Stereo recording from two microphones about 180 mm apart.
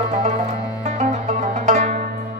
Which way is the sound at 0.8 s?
40° right (ahead or behind).